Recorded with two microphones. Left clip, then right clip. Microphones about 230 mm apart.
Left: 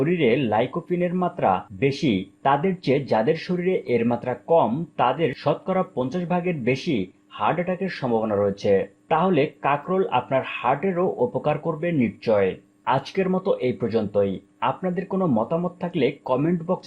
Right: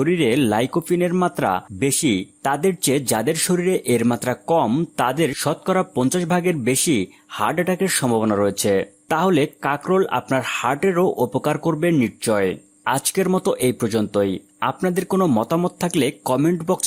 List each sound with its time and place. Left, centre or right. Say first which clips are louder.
0.0 s speech: right 2 dB; right